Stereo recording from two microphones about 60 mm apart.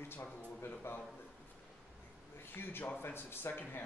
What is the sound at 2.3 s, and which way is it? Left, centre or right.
A man's voice, left.